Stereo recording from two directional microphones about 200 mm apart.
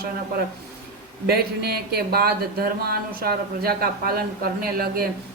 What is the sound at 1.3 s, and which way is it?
Speech, 50° right (ahead or behind).